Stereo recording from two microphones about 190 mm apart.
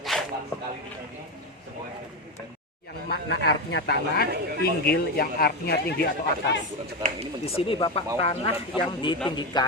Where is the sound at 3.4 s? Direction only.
60° left (ahead or behind).